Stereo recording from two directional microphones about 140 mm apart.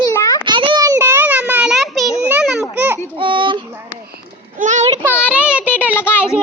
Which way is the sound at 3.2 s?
35° right (ahead or behind).